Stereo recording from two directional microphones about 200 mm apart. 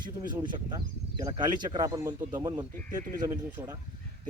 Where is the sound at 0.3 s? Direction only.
20° right (ahead or behind).